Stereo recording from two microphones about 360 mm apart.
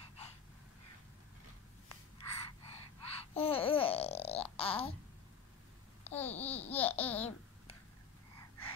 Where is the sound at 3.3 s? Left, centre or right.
Centre.